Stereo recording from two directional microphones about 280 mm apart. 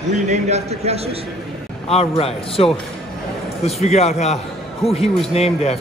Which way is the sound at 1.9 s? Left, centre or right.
Left.